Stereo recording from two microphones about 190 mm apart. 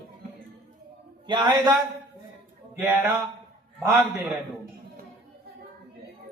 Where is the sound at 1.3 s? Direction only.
20° right (ahead or behind).